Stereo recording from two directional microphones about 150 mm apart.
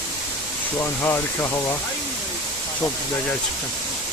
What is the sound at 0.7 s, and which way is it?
Speech, 15° left (ahead or behind).